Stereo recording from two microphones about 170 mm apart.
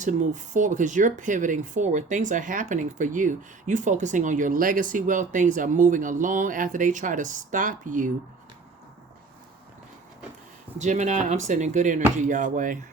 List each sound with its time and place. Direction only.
0.0 s speech: 45° right (ahead or behind)
10.8 s speech: 45° right (ahead or behind)